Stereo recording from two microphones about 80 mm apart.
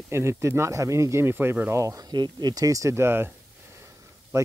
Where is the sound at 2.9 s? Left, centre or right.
Right.